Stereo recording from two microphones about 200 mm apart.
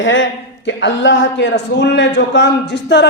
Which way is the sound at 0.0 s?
70° left (ahead or behind).